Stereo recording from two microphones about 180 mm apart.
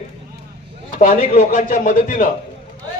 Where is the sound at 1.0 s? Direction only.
45° left (ahead or behind).